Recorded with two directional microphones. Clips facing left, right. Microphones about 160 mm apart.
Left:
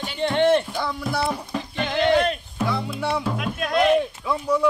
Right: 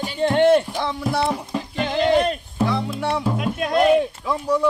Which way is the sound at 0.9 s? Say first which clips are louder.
Right 4 dB; 20° right (ahead or behind).